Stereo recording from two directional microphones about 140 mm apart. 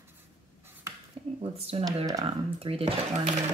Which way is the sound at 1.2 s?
45° right (ahead or behind).